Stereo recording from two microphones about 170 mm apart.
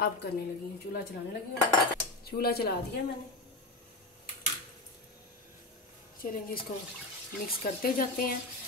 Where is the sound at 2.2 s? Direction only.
65° left (ahead or behind).